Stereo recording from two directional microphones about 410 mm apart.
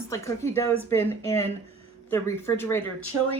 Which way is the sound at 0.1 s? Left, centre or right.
Centre.